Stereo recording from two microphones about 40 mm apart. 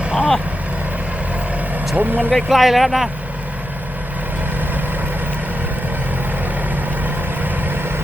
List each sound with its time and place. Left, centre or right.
0.0 s vehicle: right
2.0 s speech: right
2.3 s speech: centre
6.7 s vehicle: right